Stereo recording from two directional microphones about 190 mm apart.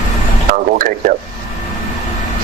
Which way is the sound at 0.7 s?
45° right (ahead or behind).